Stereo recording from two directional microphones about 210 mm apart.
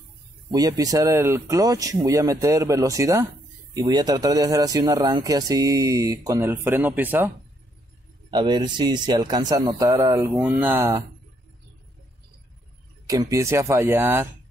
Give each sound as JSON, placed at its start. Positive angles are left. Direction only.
{"t": 0.5, "sound": "speech", "side_deg": -20}
{"t": 8.3, "sound": "a man's voice", "side_deg": -20}
{"t": 13.0, "sound": "speech", "side_deg": -15}